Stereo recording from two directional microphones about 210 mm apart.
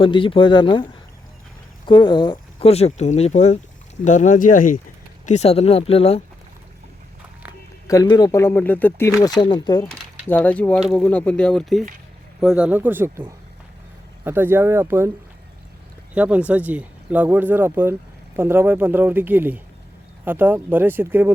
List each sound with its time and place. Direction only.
0.0 s speech: 25° left (ahead or behind)
1.9 s speech: 20° left (ahead or behind)
7.9 s speech: 15° left (ahead or behind)
10.2 s speech: 10° left (ahead or behind); by 15.1 s 10° right (ahead or behind)
16.1 s speech: 5° right (ahead or behind)